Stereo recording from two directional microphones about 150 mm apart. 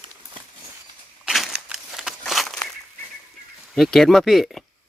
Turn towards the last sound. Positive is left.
turn(degrees=0)  # may be behind; listen again after turning